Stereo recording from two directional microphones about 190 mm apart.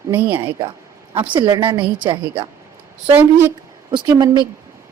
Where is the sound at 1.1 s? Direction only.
25° right (ahead or behind).